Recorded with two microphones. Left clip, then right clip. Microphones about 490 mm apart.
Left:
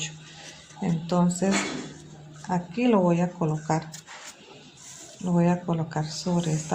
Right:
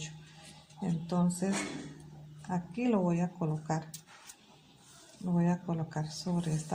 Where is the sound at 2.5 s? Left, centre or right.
Left.